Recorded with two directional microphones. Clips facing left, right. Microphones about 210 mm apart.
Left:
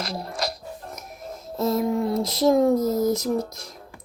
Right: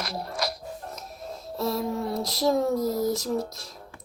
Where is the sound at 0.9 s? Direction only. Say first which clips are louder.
Left 1 dB; 20° left (ahead or behind).